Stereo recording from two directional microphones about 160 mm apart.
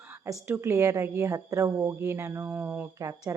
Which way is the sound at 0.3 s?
15° right (ahead or behind).